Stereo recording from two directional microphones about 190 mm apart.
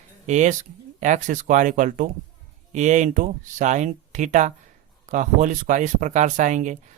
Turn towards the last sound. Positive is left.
turn(degrees=-40)  # may be behind; listen again after turning